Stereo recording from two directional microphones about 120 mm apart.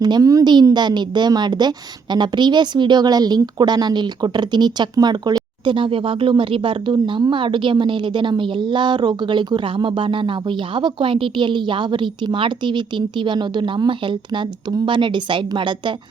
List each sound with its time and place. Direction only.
0.0 s a woman's voice: 30° right (ahead or behind)